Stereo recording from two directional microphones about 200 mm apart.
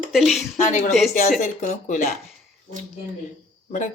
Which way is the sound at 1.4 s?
40° left (ahead or behind).